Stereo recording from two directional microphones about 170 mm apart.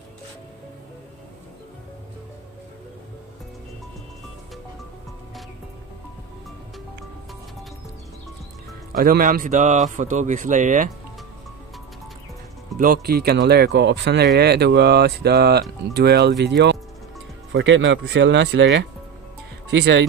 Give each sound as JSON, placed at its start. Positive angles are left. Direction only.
{"t": 8.9, "sound": "a man's voice", "side_deg": -55}
{"t": 12.7, "sound": "speech", "side_deg": -55}